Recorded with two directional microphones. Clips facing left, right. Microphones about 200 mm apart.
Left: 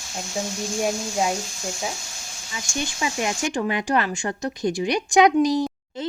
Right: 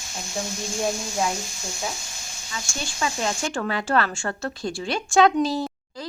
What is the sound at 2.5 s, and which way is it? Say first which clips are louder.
A woman's voice: left 3 dB; 15° left (ahead or behind).